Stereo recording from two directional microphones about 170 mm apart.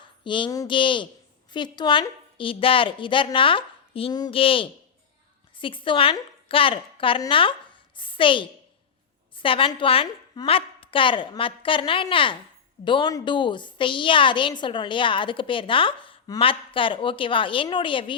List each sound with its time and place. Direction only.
0.3 s a woman's voice: 30° left (ahead or behind)